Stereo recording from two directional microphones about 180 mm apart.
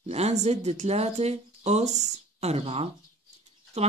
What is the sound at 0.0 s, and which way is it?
Speech, 35° right (ahead or behind).